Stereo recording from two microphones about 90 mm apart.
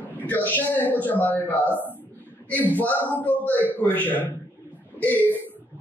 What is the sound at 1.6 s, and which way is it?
Speech, 20° right (ahead or behind).